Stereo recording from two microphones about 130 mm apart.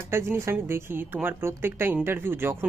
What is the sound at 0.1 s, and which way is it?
A woman's voice, 20° right (ahead or behind).